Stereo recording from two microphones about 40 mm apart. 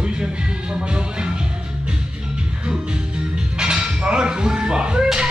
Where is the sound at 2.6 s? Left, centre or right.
Right.